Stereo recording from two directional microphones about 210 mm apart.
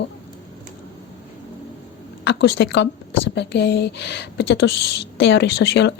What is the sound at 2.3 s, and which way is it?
A woman's voice, 55° left (ahead or behind).